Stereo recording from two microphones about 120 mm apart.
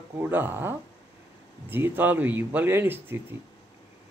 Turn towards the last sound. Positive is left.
turn(degrees=-20)  # may be behind; listen again after turning